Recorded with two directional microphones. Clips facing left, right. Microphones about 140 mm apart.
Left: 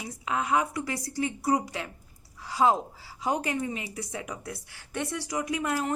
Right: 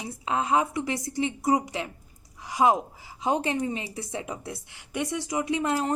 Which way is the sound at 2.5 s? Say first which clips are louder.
Right 2 dB; 15° right (ahead or behind).